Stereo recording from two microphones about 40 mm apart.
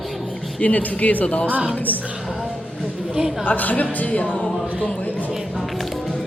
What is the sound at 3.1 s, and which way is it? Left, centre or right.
Speech, centre.